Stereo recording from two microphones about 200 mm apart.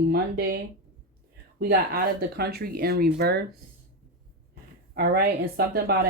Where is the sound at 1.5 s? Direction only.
50° right (ahead or behind).